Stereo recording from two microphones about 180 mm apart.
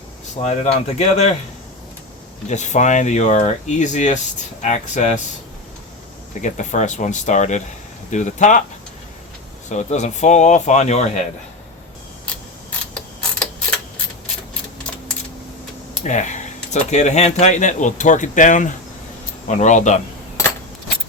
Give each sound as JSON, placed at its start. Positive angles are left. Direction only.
{"t": 0.4, "sound": "speech", "side_deg": 40}
{"t": 2.5, "sound": "speech", "side_deg": 40}
{"t": 6.4, "sound": "speech", "side_deg": 40}
{"t": 9.6, "sound": "speech", "side_deg": 40}
{"t": 16.0, "sound": "speech", "side_deg": 40}